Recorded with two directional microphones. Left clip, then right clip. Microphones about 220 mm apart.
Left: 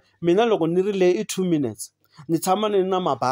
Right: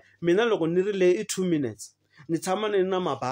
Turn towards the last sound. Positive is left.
turn(degrees=25)  # may be behind; listen again after turning